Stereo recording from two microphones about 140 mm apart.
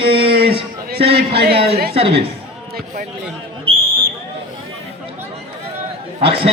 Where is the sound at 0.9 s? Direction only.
90° right.